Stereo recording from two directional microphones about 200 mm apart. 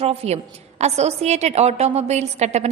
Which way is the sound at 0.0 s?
30° right (ahead or behind).